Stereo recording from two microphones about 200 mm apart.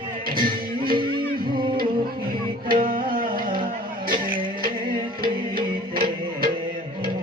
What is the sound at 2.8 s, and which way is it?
Music, 45° right (ahead or behind).